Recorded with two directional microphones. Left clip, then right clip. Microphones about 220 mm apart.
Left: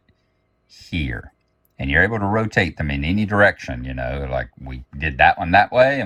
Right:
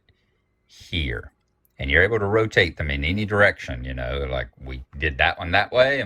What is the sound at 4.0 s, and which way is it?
Speech, 25° right (ahead or behind).